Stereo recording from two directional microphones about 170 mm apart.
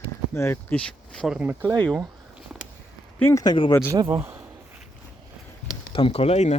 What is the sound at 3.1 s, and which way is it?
Speech, 15° left (ahead or behind).